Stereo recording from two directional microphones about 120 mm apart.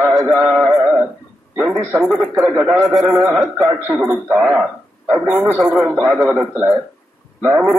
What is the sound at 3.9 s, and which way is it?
Speech, 10° right (ahead or behind).